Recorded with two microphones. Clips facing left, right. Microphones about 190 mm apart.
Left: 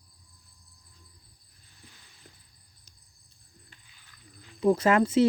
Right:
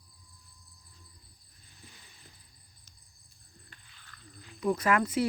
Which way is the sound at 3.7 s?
15° left (ahead or behind).